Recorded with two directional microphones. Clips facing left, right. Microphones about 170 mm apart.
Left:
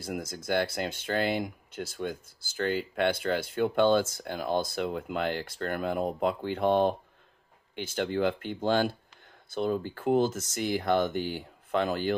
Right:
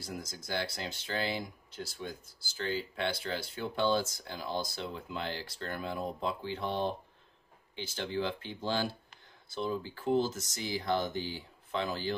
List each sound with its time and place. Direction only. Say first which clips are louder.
0.0 s speech: left 7 dB; 55° left (ahead or behind)